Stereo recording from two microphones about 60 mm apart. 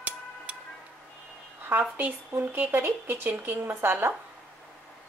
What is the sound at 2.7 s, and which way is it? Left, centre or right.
Speech, right.